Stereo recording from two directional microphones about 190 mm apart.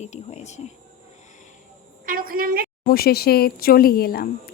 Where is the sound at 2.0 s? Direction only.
50° right (ahead or behind).